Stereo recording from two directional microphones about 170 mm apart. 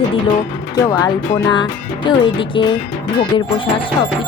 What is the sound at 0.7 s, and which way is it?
Speech, 20° left (ahead or behind).